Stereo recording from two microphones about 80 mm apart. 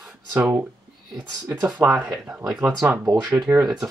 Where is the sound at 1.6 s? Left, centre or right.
Centre.